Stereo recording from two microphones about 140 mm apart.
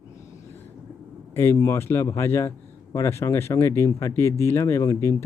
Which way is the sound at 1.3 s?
20° left (ahead or behind).